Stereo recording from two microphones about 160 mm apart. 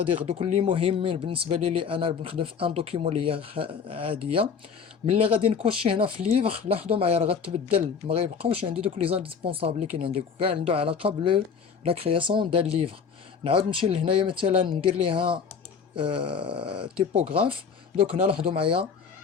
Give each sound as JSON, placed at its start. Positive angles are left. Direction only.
{"t": 0.3, "sound": "speech", "side_deg": -40}